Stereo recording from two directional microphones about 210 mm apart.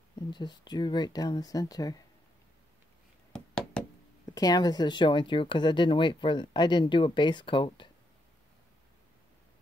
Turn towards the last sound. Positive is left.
turn(degrees=20)  # may be behind; listen again after turning